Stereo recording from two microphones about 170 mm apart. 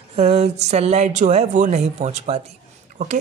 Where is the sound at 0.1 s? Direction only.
40° right (ahead or behind).